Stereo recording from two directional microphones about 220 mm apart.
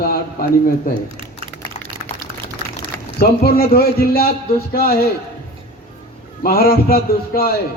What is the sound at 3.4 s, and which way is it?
Speech, 45° left (ahead or behind).